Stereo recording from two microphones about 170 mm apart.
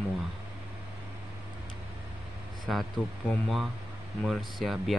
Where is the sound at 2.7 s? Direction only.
Centre (ahead or behind).